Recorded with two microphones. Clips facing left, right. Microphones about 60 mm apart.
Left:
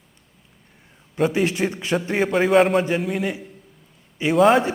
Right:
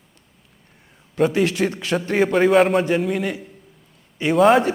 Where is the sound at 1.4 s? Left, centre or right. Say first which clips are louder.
Right 2 dB; centre.